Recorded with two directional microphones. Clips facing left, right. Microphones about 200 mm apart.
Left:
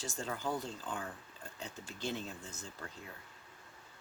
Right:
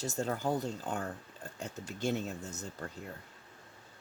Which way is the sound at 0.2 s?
40° right (ahead or behind).